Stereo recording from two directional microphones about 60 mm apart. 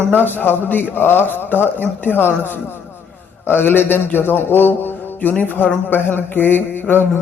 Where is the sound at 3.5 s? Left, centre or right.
Left.